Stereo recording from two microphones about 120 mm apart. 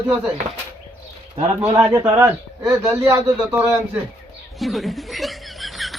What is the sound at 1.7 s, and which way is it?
A man's voice, 30° right (ahead or behind).